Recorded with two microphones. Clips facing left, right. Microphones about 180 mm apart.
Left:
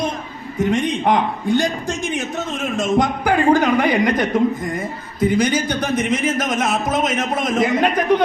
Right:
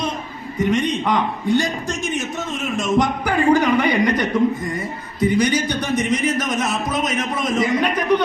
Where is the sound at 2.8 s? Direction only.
55° left (ahead or behind).